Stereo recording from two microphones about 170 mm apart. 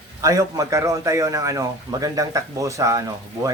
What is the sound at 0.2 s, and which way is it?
A man's voice, 20° right (ahead or behind).